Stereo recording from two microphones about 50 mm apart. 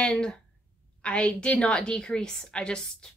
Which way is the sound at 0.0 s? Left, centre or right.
Centre.